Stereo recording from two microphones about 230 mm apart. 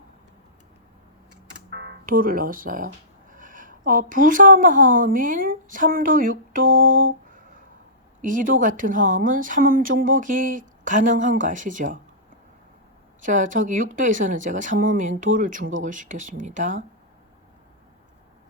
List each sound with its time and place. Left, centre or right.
2.0 s speech: right
13.2 s speech: right